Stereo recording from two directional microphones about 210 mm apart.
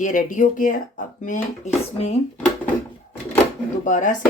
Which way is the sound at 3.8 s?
35° left (ahead or behind).